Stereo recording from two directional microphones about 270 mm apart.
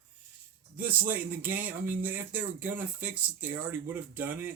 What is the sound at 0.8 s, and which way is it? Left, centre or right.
Speech, centre.